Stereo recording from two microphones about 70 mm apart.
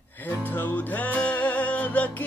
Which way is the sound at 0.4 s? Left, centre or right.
Left.